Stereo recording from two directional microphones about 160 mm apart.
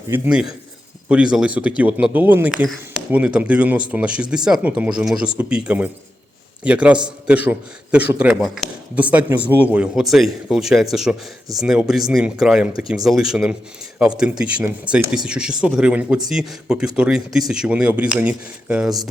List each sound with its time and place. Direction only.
0.1 s a man's voice: 5° right (ahead or behind)